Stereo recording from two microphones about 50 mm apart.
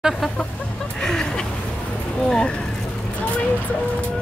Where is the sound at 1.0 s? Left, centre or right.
Centre.